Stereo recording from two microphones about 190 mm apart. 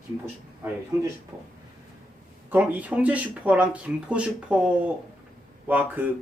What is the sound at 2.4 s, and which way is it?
Speech, 10° right (ahead or behind).